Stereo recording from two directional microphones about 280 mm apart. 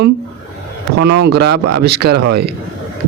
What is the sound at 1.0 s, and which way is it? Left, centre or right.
Speech, right.